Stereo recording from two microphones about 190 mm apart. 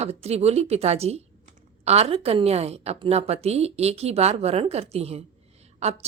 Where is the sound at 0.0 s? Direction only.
35° right (ahead or behind).